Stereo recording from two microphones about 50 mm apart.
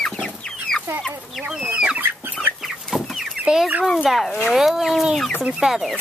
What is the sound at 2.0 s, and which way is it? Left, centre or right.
Chicken, right.